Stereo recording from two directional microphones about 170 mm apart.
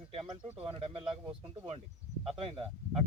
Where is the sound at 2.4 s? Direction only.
30° right (ahead or behind).